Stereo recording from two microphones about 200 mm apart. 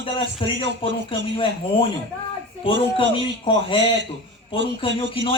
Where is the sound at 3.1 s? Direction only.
25° left (ahead or behind).